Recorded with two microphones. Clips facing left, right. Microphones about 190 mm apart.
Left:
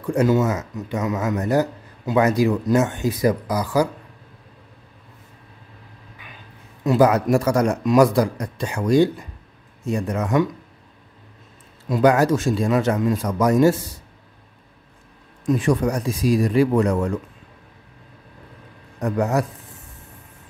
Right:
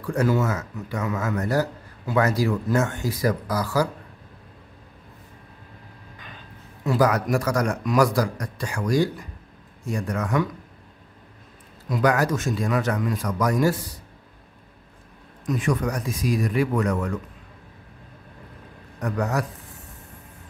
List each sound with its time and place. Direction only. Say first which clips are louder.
0.0 s speech: left 4 dB; 20° left (ahead or behind)
6.8 s speech: left 5 dB; 25° left (ahead or behind)
11.9 s speech: left 5 dB; 30° left (ahead or behind)
15.4 s speech: left 5 dB; 30° left (ahead or behind)
18.9 s speech: left 5 dB; 25° left (ahead or behind)